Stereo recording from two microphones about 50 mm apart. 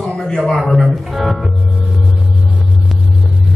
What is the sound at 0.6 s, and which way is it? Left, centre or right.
Speech, centre.